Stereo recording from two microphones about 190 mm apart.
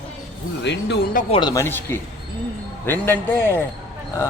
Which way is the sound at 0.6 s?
65° left (ahead or behind).